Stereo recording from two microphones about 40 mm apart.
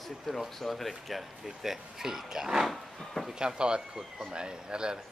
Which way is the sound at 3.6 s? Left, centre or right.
Right.